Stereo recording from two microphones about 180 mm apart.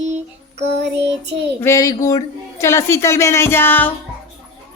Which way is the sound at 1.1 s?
70° right (ahead or behind).